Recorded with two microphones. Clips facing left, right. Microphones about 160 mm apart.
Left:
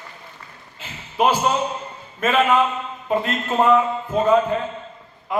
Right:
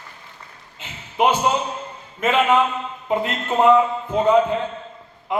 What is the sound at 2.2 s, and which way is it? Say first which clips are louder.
A man's voice: even; 20° right (ahead or behind).